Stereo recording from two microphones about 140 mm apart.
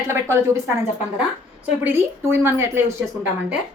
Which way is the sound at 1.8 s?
20° right (ahead or behind).